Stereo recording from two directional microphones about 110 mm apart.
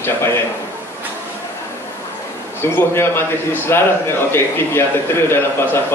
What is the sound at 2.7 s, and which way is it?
A man's voice, 20° left (ahead or behind).